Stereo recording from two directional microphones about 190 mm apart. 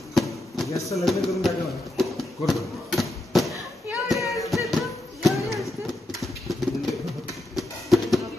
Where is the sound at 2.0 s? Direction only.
Centre (ahead or behind).